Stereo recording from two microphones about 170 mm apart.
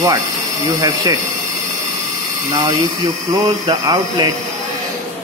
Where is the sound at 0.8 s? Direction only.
20° right (ahead or behind).